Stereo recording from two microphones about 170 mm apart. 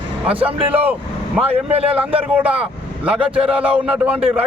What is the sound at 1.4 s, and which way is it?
Speech, 35° right (ahead or behind).